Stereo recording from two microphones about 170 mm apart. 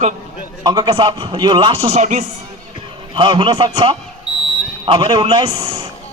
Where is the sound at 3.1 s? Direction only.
30° right (ahead or behind).